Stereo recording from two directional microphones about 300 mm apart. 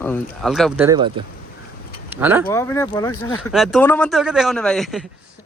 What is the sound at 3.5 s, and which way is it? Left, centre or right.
A man's voice, centre.